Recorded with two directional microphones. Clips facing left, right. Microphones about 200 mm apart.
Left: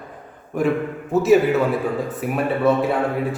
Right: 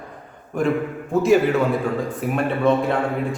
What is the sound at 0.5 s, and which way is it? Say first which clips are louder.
A man's voice: left 1 dB; centre (ahead or behind).